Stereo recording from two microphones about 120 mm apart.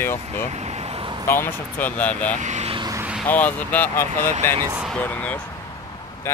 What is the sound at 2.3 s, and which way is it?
Speech, 80° right.